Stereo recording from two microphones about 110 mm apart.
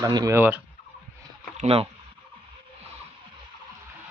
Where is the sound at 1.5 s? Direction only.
65° right (ahead or behind).